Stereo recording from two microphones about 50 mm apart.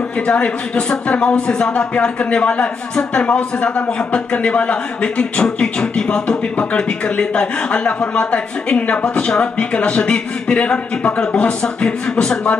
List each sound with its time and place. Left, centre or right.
0.3 s speech: centre